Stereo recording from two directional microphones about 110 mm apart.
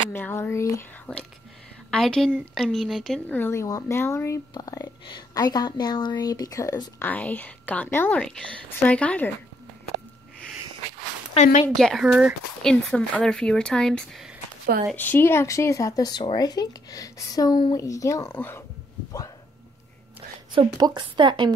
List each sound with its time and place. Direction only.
0.1 s speech: 20° left (ahead or behind)
1.1 s a woman's voice: 15° left (ahead or behind)
3.3 s speech: 20° left (ahead or behind)
7.0 s speech: 15° left (ahead or behind)
11.4 s speech: 65° left (ahead or behind)
11.7 s a woman's voice: 5° left (ahead or behind)
12.6 s speech: 10° left (ahead or behind)
15.0 s speech: 20° left (ahead or behind)
20.8 s speech: 45° right (ahead or behind)